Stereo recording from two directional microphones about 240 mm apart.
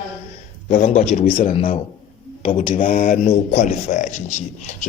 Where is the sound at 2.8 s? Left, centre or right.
Left.